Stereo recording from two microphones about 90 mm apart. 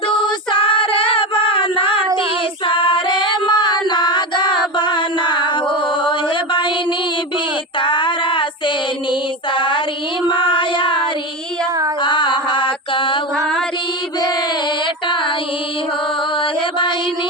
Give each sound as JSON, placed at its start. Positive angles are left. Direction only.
{"t": 0.2, "sound": "female singing", "side_deg": 75}
{"t": 2.7, "sound": "music", "side_deg": 70}
{"t": 4.8, "sound": "a sound", "side_deg": 60}
{"t": 7.8, "sound": "child singing", "side_deg": 65}
{"t": 9.5, "sound": "music", "side_deg": 65}
{"t": 10.2, "sound": "child singing", "side_deg": 65}
{"t": 12.0, "sound": "mantra", "side_deg": 60}
{"t": 16.4, "sound": "mantra", "side_deg": 65}